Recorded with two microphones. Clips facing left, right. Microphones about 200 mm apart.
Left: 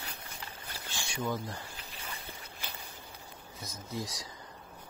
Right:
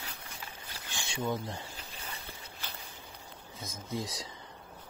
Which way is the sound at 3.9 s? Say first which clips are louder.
Right 2 dB; 25° right (ahead or behind).